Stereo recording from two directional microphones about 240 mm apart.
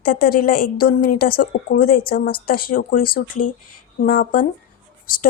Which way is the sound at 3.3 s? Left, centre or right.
Left.